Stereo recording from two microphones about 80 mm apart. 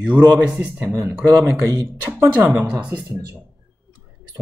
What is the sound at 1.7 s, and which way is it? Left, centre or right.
Speech, right.